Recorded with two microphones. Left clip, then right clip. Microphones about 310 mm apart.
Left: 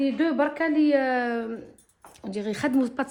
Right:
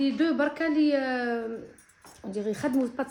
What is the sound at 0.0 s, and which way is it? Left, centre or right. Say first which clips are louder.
A woman's voice: left 2 dB; centre.